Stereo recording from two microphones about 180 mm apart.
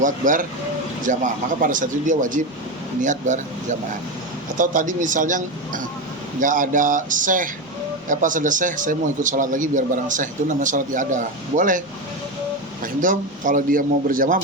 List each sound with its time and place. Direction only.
0.0 s a man's voice: 45° right (ahead or behind)
12.8 s a man's voice: 50° right (ahead or behind)